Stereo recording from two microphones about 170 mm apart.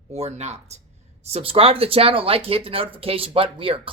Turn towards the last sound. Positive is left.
turn(degrees=-30)  # may be behind; listen again after turning